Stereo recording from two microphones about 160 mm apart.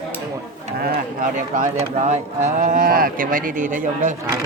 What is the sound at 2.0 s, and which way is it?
Speech, 50° right (ahead or behind).